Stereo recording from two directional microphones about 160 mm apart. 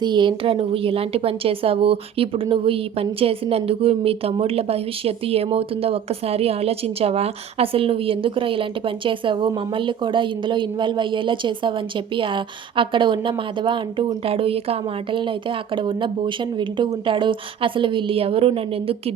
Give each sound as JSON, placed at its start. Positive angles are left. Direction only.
{"t": 0.0, "sound": "a woman's voice", "side_deg": -30}